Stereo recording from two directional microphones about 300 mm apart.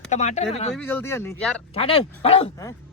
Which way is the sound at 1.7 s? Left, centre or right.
Centre.